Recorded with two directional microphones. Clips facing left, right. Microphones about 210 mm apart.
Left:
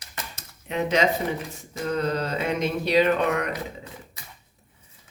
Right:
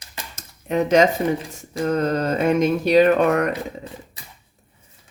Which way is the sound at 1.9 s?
45° right (ahead or behind).